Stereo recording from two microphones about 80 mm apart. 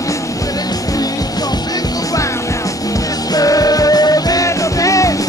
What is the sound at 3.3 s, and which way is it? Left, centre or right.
Music, left.